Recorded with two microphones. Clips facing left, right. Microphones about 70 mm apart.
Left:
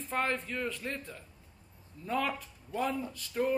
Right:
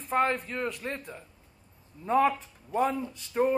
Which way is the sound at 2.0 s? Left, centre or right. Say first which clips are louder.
Right 8 dB; right.